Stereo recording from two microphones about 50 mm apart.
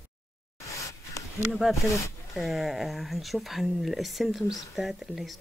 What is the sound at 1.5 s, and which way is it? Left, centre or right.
Speech, centre.